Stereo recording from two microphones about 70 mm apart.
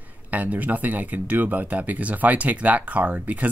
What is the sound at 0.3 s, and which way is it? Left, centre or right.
Speech, right.